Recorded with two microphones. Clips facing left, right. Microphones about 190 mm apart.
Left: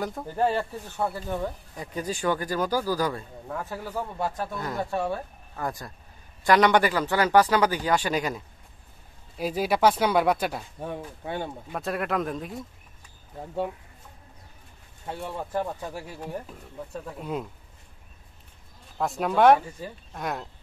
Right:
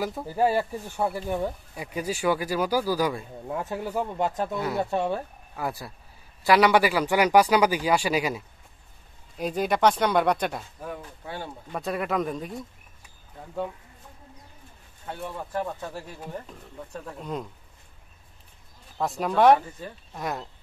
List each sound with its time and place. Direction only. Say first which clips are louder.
0.0 s speech: right 2 dB; 5° right (ahead or behind); by 5.2 s 20° right (ahead or behind)
5.6 s speech: right 1 dB; 5° right (ahead or behind)
9.4 s speech: even; 5° left (ahead or behind)
10.8 s speech: left 3 dB; 25° left (ahead or behind)
11.7 s speech: right 1 dB; centre (ahead or behind)
15.5 s speech: left 1 dB; 15° left (ahead or behind)
18.9 s speech: even; centre (ahead or behind)